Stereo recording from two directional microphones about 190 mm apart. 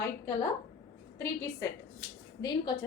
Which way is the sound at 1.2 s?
15° left (ahead or behind).